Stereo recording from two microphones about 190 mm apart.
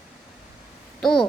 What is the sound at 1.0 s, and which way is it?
Speech, 5° left (ahead or behind).